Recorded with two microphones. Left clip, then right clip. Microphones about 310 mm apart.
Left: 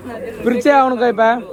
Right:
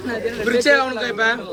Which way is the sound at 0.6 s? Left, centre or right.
Centre.